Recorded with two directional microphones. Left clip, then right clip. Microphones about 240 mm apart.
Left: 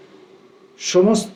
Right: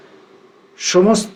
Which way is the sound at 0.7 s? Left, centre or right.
Right.